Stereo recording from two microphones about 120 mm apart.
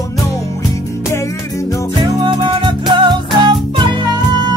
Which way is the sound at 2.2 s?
40° right (ahead or behind).